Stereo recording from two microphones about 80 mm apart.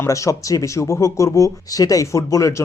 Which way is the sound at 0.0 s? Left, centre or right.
Left.